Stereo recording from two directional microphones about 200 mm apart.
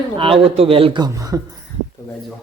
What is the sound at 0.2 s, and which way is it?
Speech, 25° right (ahead or behind).